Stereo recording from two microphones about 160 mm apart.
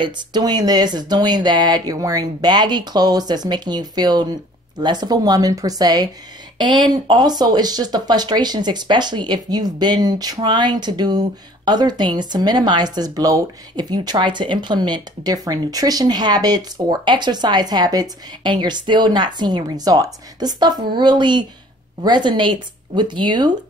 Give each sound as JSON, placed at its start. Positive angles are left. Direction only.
{"t": 0.0, "sound": "speech", "side_deg": -25}